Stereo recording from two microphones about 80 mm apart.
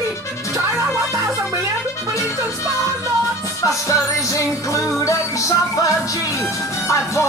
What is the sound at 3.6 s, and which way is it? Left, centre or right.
Music, left.